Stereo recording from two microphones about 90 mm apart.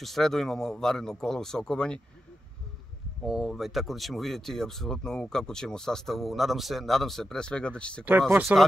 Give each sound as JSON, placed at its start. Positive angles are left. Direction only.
{"t": 0.0, "sound": "speech", "side_deg": 5}
{"t": 3.3, "sound": "speech", "side_deg": 0}
{"t": 8.3, "sound": "speech", "side_deg": -25}